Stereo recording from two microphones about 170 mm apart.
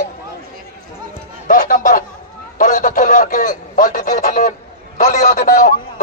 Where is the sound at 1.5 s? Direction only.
50° left (ahead or behind).